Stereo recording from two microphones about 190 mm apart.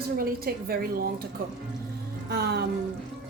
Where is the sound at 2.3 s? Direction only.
60° right (ahead or behind).